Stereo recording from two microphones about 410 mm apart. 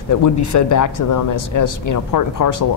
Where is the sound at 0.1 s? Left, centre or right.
Left.